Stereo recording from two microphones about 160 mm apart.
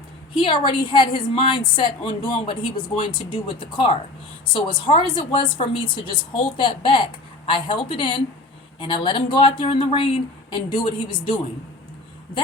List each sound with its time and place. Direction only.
0.3 s a woman's voice: 30° left (ahead or behind)